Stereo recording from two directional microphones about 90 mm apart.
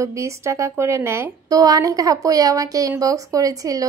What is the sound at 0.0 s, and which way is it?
Speech, 35° right (ahead or behind).